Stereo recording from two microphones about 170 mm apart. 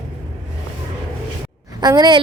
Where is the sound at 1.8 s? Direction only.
25° right (ahead or behind).